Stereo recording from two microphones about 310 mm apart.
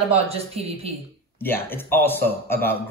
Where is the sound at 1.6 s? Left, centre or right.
Centre.